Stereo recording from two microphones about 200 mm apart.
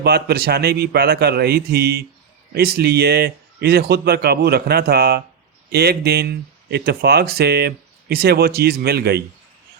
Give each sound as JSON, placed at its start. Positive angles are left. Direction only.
{"t": 0.0, "sound": "speech", "side_deg": -55}